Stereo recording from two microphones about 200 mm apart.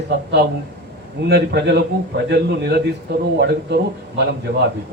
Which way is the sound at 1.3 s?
55° right (ahead or behind).